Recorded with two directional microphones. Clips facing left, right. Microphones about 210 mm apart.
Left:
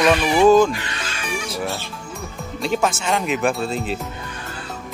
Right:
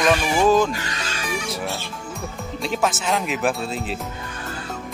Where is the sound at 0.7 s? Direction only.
40° right (ahead or behind).